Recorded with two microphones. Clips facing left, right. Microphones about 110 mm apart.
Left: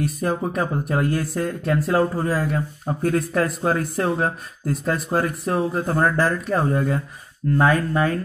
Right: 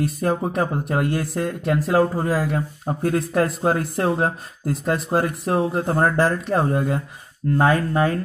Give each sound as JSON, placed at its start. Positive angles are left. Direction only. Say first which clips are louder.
{"t": 0.0, "sound": "speech", "louder": "right 1 dB", "side_deg": -30}